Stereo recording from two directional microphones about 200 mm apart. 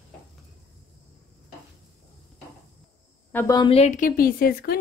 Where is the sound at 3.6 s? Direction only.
30° left (ahead or behind); by 4.8 s 50° left (ahead or behind).